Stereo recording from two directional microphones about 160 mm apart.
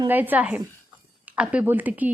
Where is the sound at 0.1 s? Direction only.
10° right (ahead or behind).